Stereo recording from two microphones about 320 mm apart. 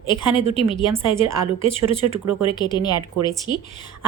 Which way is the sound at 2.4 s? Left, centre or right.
Centre.